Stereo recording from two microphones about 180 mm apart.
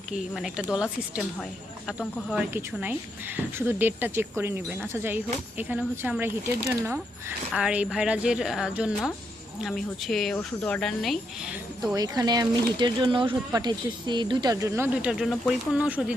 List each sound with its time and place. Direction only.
0.3 s a woman's voice: 5° right (ahead or behind)
11.9 s speech: 20° right (ahead or behind)
15.0 s a woman's voice: centre (ahead or behind)